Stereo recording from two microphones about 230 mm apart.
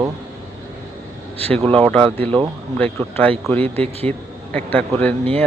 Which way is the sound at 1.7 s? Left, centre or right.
Centre.